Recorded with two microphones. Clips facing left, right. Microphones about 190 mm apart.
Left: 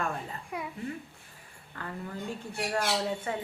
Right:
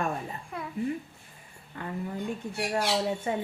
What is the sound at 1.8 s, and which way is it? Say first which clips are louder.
Speech: right 3 dB; 20° right (ahead or behind).